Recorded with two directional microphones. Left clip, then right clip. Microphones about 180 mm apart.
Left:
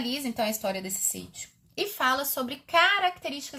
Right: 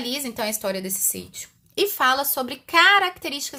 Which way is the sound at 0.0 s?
30° right (ahead or behind).